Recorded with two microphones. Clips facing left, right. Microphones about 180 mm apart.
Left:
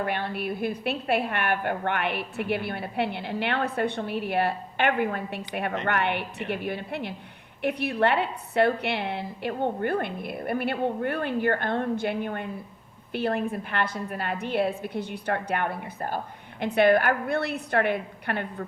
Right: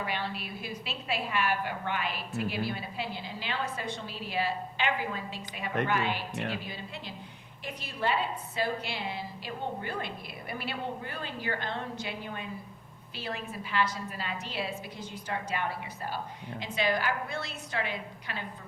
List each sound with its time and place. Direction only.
0.0 s a woman's voice: 55° left (ahead or behind)